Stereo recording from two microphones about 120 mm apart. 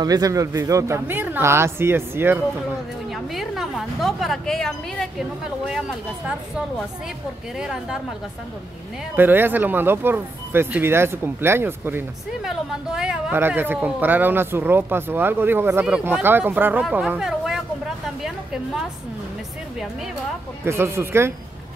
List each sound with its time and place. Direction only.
0.0 s speech: 30° right (ahead or behind)
3.1 s a woman's voice: centre (ahead or behind)
9.1 s speech: 15° right (ahead or behind)
12.3 s a woman's voice: 5° right (ahead or behind)
13.3 s speech: 15° right (ahead or behind)
17.2 s a sound: 5° right (ahead or behind)
20.6 s speech: 20° right (ahead or behind)